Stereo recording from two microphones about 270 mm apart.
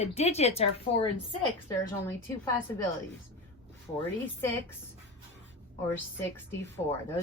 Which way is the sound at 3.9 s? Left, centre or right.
Centre.